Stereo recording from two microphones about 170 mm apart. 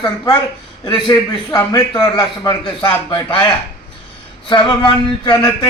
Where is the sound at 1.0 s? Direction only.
25° left (ahead or behind).